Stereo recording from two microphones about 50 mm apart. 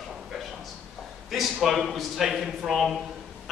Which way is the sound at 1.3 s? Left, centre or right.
Centre.